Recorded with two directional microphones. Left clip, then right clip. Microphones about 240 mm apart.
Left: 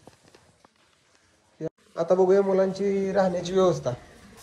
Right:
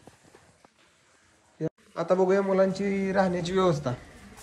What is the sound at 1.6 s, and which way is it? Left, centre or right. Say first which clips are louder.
A man's voice: left 2 dB; centre.